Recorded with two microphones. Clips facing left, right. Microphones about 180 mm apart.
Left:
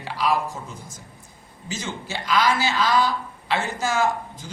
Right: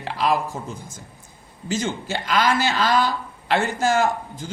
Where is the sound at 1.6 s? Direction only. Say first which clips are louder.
Right 6 dB; 55° right (ahead or behind).